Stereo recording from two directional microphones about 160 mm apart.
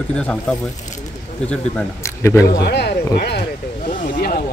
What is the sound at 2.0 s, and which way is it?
Speech, 20° left (ahead or behind).